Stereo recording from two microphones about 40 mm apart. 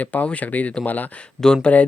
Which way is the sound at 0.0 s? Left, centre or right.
Left.